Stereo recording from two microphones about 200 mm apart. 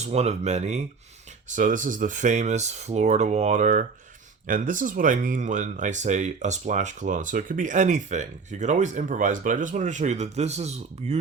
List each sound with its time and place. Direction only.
0.0 s speech: 35° right (ahead or behind)